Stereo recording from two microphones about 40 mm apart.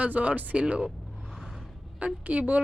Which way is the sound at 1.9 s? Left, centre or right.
Right.